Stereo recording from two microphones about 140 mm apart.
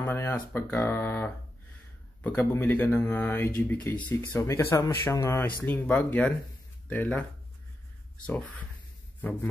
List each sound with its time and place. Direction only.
0.0 s speech: 15° left (ahead or behind)
8.3 s speech: 10° left (ahead or behind)